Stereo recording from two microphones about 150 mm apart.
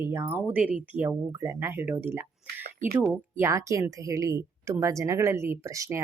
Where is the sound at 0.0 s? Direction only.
15° right (ahead or behind).